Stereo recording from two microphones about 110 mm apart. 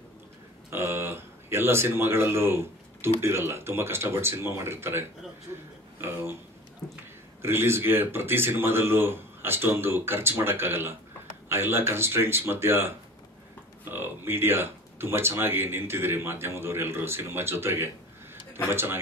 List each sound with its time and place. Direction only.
0.7 s a sound: 20° right (ahead or behind)
3.2 s speech: 25° right (ahead or behind)
7.4 s speech: 20° right (ahead or behind)